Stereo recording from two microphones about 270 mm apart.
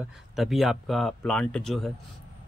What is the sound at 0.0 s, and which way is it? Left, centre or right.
Speech, centre.